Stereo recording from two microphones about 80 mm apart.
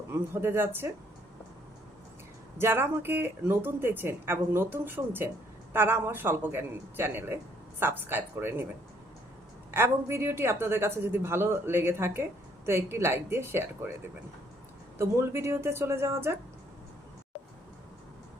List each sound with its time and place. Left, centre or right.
0.1 s speech: right
2.6 s speech: right
9.7 s a woman's voice: right
14.9 s a woman's voice: right